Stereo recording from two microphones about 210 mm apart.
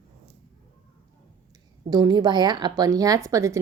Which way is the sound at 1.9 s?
20° right (ahead or behind).